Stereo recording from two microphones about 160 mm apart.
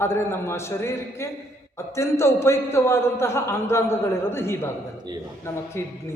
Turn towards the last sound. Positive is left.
turn(degrees=15)  # may be behind; listen again after turning